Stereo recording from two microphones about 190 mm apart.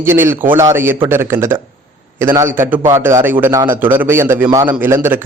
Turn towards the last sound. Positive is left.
turn(degrees=-10)  # may be behind; listen again after turning